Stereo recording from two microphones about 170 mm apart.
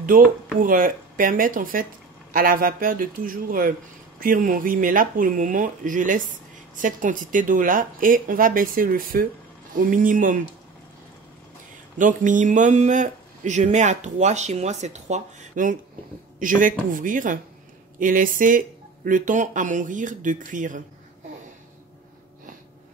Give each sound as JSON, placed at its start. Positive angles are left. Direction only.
{"t": 0.0, "sound": "a man's voice", "side_deg": -55}
{"t": 12.0, "sound": "a man's voice", "side_deg": -50}